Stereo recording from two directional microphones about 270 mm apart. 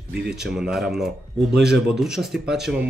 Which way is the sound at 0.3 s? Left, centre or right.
Centre.